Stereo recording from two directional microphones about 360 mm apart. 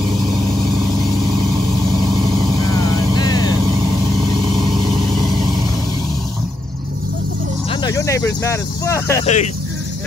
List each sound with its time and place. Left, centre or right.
3.2 s vehicle: centre
7.8 s speech: centre
9.2 s speech: centre